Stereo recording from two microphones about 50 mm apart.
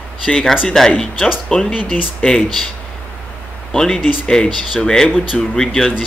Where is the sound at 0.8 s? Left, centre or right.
Centre.